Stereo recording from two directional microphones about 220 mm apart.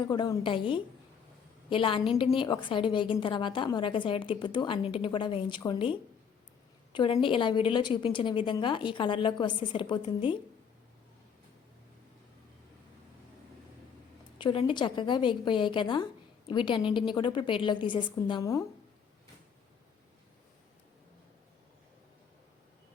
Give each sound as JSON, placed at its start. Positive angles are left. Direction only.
{"t": 0.0, "sound": "a woman's voice", "side_deg": 20}
{"t": 14.3, "sound": "a woman's voice", "side_deg": 20}